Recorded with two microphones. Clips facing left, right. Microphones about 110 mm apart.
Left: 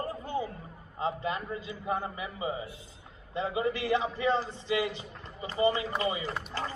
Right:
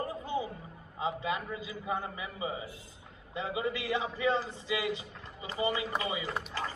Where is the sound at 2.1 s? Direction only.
30° left (ahead or behind).